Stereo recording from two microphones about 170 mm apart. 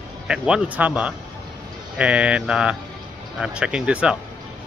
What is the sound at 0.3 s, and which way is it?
Speech, 5° right (ahead or behind).